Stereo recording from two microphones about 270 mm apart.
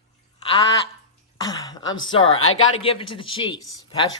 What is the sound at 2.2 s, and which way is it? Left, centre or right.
Speech, left.